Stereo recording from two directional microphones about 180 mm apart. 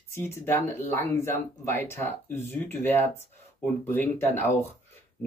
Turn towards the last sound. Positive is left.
turn(degrees=15)  # may be behind; listen again after turning